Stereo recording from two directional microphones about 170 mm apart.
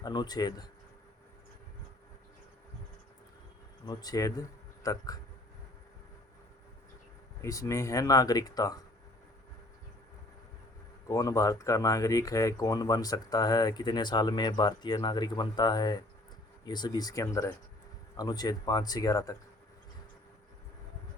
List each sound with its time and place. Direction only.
0.0 s speech: 25° left (ahead or behind)
3.8 s speech: 20° left (ahead or behind)
7.4 s speech: 20° left (ahead or behind)
11.1 s speech: 20° left (ahead or behind)